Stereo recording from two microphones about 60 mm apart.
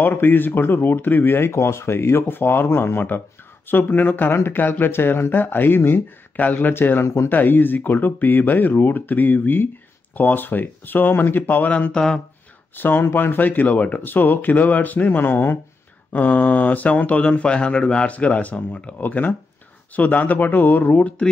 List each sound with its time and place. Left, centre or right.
0.0 s speech: left
11.9 s speech: centre
12.7 s speech: left